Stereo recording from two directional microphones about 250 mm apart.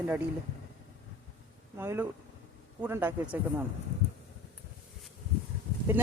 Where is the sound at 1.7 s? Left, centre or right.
Centre.